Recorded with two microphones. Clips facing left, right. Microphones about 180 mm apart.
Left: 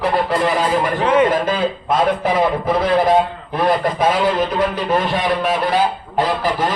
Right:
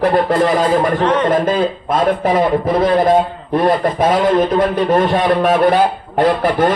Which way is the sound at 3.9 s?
50° right (ahead or behind).